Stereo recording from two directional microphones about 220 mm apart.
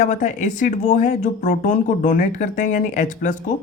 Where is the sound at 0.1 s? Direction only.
35° left (ahead or behind).